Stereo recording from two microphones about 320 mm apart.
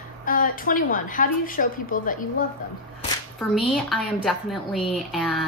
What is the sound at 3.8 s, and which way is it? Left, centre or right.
A woman's voice, centre.